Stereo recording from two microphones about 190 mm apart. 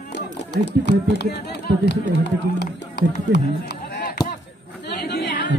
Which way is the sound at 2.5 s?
65° left (ahead or behind).